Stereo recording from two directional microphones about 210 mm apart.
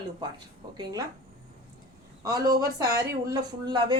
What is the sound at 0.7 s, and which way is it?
Speech, 20° right (ahead or behind).